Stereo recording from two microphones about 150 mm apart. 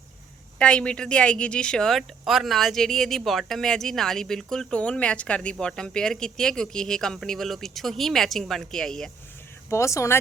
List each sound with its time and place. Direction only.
0.6 s speech: 5° left (ahead or behind)
9.6 s speech: 20° left (ahead or behind)